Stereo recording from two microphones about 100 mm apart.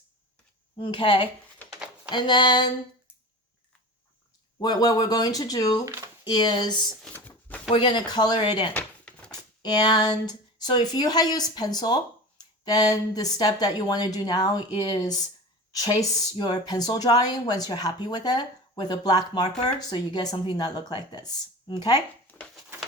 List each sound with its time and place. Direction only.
0.8 s speech: 55° left (ahead or behind)
4.6 s speech: 40° left (ahead or behind)
5.8 s speech: 30° right (ahead or behind)
6.2 s speech: 45° left (ahead or behind)
7.1 s a sound: 15° left (ahead or behind)
7.7 s speech: 55° left (ahead or behind)
8.7 s a sound: 10° left (ahead or behind)
9.3 s speech: 40° left (ahead or behind)